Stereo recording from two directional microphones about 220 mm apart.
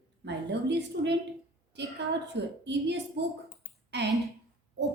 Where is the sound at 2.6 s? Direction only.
50° right (ahead or behind).